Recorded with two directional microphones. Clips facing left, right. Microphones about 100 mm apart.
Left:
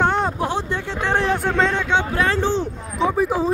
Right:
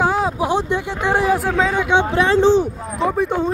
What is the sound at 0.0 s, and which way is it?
Vehicle, 5° right (ahead or behind).